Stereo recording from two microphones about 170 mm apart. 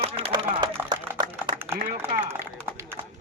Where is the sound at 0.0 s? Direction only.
30° right (ahead or behind).